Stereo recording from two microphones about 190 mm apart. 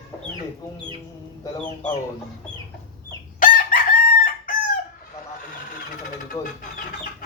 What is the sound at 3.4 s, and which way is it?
Chicken, 45° left (ahead or behind).